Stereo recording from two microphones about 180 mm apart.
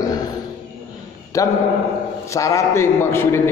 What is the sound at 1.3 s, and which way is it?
A man's voice, 20° left (ahead or behind).